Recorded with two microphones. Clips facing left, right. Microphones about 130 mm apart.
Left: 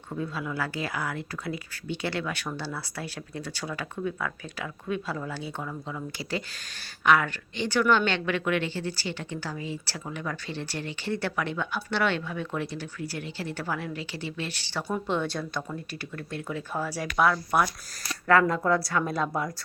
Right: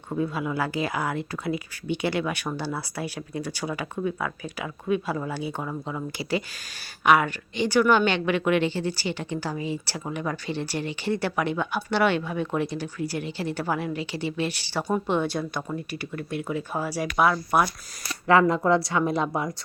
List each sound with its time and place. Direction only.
0.1 s speech: 15° right (ahead or behind)
5.6 s a woman's voice: 25° right (ahead or behind)
7.0 s speech: 15° right (ahead or behind)
18.3 s a woman's voice: 20° right (ahead or behind)